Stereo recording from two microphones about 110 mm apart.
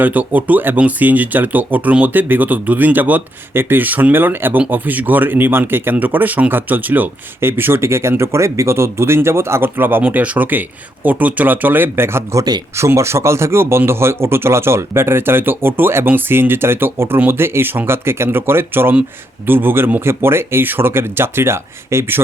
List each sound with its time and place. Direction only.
0.0 s speech: 15° right (ahead or behind)